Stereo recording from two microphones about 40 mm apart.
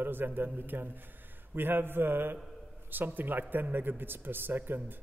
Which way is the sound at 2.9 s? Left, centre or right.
Right.